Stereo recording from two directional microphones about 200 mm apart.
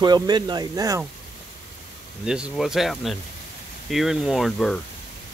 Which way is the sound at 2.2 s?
5° right (ahead or behind).